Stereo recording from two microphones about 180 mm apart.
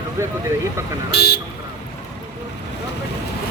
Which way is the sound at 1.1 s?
60° left (ahead or behind).